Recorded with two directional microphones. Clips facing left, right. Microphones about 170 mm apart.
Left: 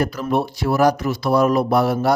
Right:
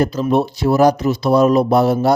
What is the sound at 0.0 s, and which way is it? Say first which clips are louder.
A man's voice: right 4 dB; 25° right (ahead or behind).